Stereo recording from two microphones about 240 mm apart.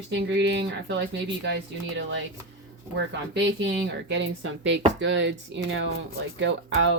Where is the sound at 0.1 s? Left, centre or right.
Right.